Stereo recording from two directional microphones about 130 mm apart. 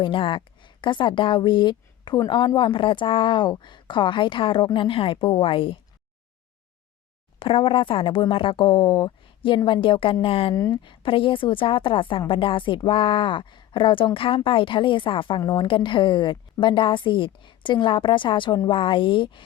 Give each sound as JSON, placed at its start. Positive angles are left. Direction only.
{"t": 0.0, "sound": "a woman's voice", "side_deg": 40}
{"t": 7.3, "sound": "a woman's voice", "side_deg": 45}
{"t": 10.5, "sound": "speech", "side_deg": 25}
{"t": 10.8, "sound": "a woman's voice", "side_deg": 40}